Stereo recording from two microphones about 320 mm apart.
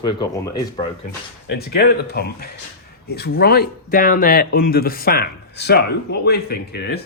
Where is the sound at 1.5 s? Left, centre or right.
Left.